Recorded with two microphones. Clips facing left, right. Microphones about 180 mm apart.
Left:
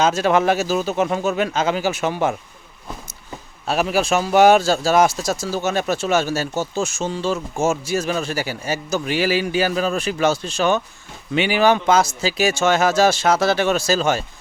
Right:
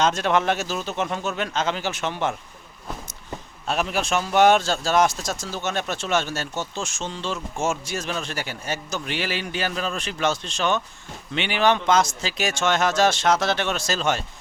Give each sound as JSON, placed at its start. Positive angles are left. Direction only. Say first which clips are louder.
{"t": 0.0, "sound": "speech", "louder": "left 4 dB", "side_deg": 5}
{"t": 3.7, "sound": "a man's voice", "louder": "left 5 dB", "side_deg": 5}